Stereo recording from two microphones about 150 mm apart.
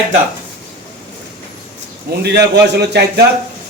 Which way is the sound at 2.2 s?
90° right.